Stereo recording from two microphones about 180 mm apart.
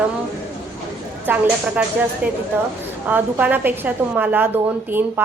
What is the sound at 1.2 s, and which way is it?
Speech, 10° right (ahead or behind).